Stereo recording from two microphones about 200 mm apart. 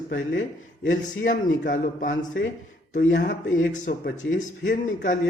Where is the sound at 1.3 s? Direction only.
40° left (ahead or behind).